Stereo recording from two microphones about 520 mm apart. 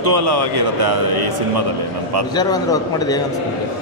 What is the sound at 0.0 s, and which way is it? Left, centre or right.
A man's voice, right.